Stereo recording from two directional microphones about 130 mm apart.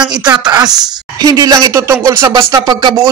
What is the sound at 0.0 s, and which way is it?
A man's voice, 30° right (ahead or behind).